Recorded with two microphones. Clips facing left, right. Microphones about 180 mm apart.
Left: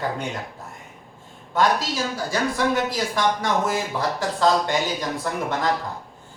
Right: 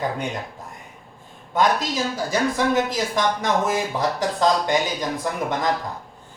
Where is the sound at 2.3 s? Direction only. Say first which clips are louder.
Right 1 dB; 20° right (ahead or behind).